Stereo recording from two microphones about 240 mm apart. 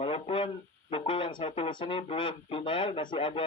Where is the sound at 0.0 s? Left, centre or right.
Left.